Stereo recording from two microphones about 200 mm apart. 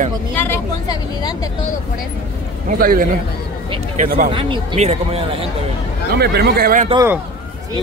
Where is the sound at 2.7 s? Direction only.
45° right (ahead or behind).